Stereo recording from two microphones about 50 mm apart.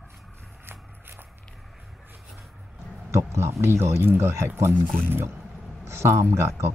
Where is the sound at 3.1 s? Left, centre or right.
Right.